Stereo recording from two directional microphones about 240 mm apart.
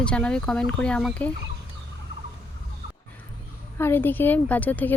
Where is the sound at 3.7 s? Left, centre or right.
Centre.